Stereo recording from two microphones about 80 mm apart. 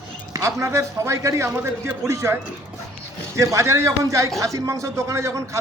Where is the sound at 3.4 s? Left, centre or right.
Right.